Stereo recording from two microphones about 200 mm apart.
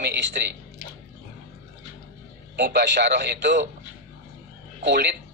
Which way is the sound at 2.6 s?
55° right (ahead or behind).